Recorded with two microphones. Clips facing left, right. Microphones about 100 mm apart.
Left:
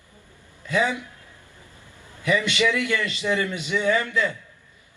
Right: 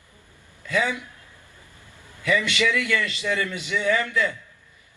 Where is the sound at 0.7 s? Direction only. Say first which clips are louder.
Left 1 dB; 20° left (ahead or behind).